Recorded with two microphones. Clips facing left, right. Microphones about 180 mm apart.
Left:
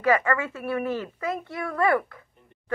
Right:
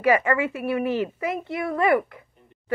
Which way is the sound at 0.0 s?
15° right (ahead or behind).